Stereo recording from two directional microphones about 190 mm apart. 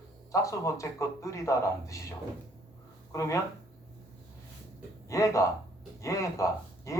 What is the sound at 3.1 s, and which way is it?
Speech, 15° left (ahead or behind).